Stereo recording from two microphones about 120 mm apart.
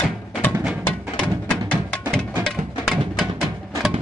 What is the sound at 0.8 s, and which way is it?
Music, 10° left (ahead or behind).